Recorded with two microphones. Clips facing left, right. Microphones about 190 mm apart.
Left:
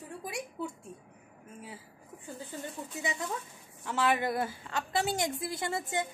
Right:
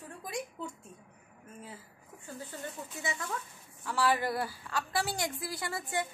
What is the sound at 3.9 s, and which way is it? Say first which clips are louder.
A woman's voice: left 1 dB; 20° left (ahead or behind).